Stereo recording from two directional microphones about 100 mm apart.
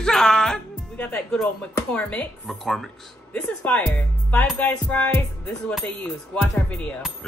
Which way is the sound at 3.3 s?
15° left (ahead or behind).